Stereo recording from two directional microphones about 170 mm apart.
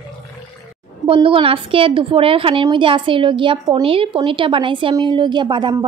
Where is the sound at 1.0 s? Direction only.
30° right (ahead or behind).